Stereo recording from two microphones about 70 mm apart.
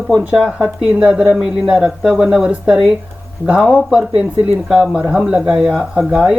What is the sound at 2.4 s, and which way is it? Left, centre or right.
Speech, centre.